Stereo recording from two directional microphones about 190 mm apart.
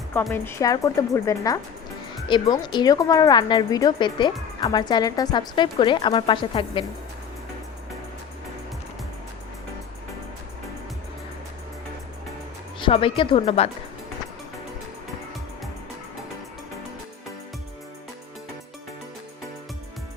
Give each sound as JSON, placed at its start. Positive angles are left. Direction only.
{"t": 0.1, "sound": "a woman's voice", "side_deg": 10}
{"t": 12.8, "sound": "a woman's voice", "side_deg": 30}